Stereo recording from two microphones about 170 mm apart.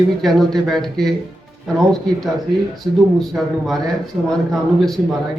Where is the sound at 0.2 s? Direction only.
Centre (ahead or behind).